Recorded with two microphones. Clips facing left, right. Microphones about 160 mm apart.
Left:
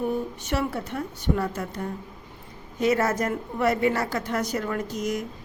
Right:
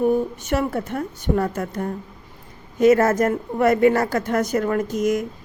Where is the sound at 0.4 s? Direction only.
50° right (ahead or behind).